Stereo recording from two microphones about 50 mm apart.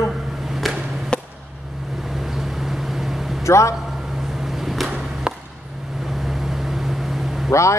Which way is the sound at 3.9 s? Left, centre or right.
Centre.